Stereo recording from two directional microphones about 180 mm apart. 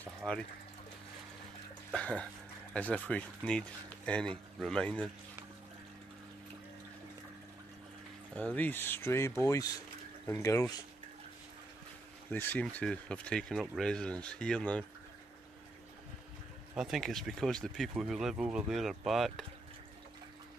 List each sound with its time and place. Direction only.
0.0 s speech: 5° left (ahead or behind)
1.9 s speech: 5° left (ahead or behind)
8.4 s speech: 10° left (ahead or behind)
12.3 s speech: 10° left (ahead or behind)
16.7 s speech: centre (ahead or behind)